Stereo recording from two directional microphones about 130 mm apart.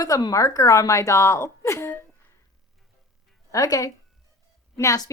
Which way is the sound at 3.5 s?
25° left (ahead or behind).